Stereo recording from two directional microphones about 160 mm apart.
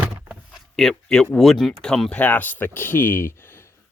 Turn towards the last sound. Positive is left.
turn(degrees=15)  # may be behind; listen again after turning